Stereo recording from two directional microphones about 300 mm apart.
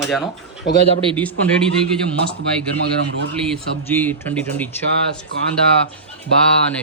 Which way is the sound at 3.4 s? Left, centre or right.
Centre.